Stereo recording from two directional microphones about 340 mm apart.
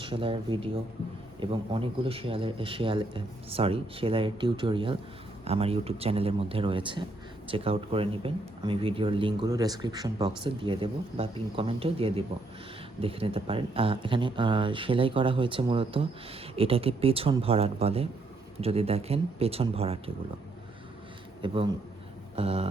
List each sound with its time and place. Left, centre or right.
0.0 s speech: centre
21.4 s speech: centre